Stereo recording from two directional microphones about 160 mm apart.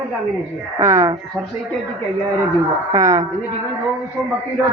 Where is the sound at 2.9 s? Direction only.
25° right (ahead or behind).